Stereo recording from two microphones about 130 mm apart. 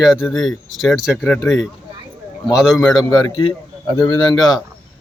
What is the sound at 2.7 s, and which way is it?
A man's voice, 30° left (ahead or behind).